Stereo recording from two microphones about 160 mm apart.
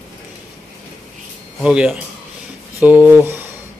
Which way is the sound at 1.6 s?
5° right (ahead or behind).